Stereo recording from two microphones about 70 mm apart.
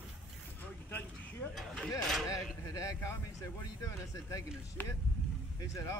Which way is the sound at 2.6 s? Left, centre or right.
Left.